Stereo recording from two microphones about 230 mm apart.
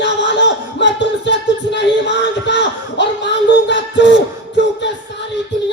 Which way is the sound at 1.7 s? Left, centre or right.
Left.